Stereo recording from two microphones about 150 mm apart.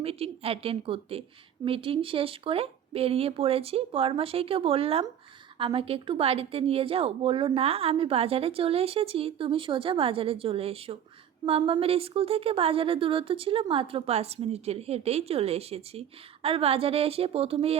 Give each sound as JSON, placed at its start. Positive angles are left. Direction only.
{"t": 0.0, "sound": "a woman's voice", "side_deg": -40}